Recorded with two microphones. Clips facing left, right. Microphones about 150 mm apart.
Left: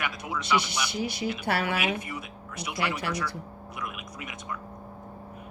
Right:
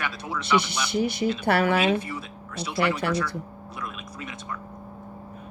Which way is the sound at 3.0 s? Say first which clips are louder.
Right 6 dB; 55° right (ahead or behind).